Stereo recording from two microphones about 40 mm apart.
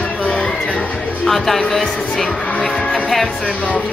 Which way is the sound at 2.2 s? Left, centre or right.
Left.